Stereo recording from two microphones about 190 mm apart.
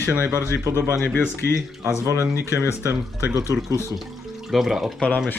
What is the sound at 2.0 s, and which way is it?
Speech, 15° right (ahead or behind).